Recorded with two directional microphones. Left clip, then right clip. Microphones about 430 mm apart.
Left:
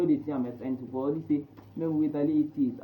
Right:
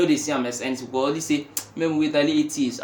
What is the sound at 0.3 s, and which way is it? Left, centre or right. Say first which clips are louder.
Speech: right 8 dB; right.